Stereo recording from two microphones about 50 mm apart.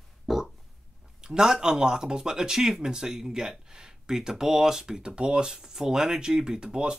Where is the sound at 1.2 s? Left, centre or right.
Centre.